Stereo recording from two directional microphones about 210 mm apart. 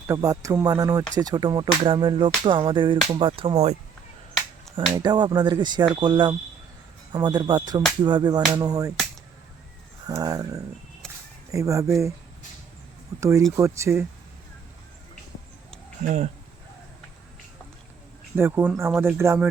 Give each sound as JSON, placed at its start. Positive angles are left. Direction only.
{"t": 0.1, "sound": "speech", "side_deg": -15}
{"t": 4.9, "sound": "speech", "side_deg": -20}
{"t": 10.1, "sound": "speech", "side_deg": -15}
{"t": 13.1, "sound": "speech", "side_deg": -15}
{"t": 16.0, "sound": "speech", "side_deg": -35}
{"t": 18.3, "sound": "speech", "side_deg": -10}